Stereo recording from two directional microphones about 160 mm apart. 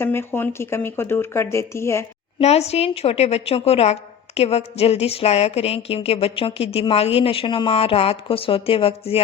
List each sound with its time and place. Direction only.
0.0 s speech: 15° left (ahead or behind)
2.4 s speech: 40° left (ahead or behind)